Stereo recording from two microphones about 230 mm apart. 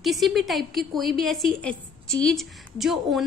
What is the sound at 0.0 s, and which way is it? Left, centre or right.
A woman's voice, centre.